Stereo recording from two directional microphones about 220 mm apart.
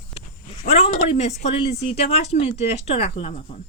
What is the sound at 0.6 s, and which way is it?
Speech, 30° left (ahead or behind).